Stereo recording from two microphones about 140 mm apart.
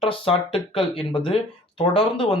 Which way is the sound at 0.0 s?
40° left (ahead or behind).